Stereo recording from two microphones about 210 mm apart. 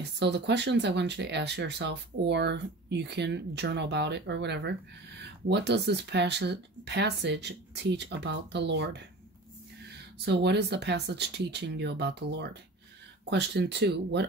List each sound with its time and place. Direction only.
0.0 s speech: 55° right (ahead or behind)
10.1 s speech: 55° right (ahead or behind)